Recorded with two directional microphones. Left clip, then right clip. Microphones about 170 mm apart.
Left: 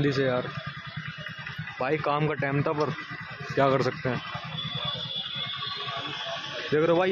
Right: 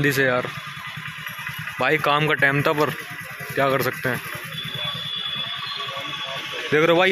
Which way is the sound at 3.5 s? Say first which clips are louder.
Right 3 dB; 5° left (ahead or behind).